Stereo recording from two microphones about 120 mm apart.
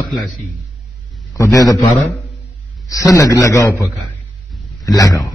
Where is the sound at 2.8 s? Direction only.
30° left (ahead or behind).